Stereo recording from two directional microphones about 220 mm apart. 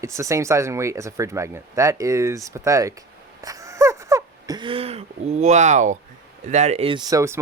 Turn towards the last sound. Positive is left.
turn(degrees=-15)  # may be behind; listen again after turning